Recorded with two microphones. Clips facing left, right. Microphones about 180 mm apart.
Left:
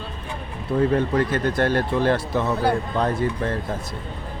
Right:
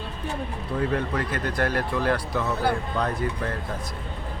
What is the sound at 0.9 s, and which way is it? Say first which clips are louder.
Speech: left 6 dB; 25° left (ahead or behind).